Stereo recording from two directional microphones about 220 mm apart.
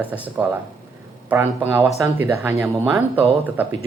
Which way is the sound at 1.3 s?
10° right (ahead or behind).